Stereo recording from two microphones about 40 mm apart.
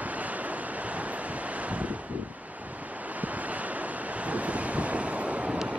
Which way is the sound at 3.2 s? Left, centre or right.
Right.